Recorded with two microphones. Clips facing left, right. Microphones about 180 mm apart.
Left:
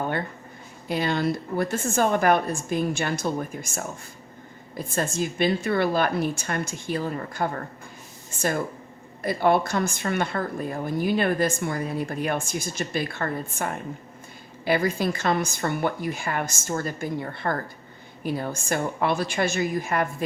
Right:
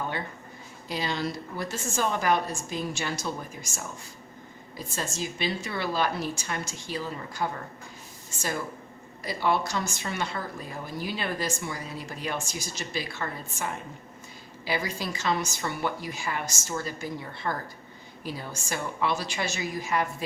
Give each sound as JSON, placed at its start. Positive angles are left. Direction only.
{"t": 0.9, "sound": "a woman's voice", "side_deg": 55}